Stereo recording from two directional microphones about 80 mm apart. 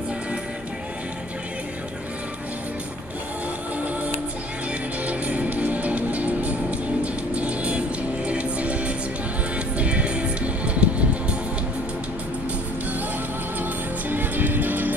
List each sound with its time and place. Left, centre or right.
5.0 s music: centre
13.6 s music: right